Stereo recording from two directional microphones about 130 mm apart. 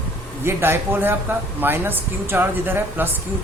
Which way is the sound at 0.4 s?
15° right (ahead or behind).